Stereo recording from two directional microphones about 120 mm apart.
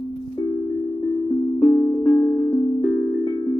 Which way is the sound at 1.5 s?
20° left (ahead or behind).